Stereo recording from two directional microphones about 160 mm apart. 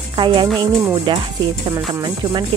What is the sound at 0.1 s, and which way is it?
Music, 30° right (ahead or behind).